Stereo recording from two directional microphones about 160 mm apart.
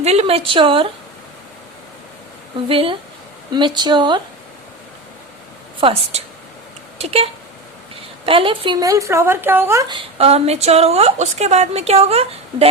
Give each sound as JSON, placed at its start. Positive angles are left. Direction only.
{"t": 0.0, "sound": "a woman's voice", "side_deg": -40}
{"t": 2.6, "sound": "a woman's voice", "side_deg": -35}
{"t": 5.8, "sound": "a woman's voice", "side_deg": -40}
{"t": 9.8, "sound": "a woman's voice", "side_deg": -35}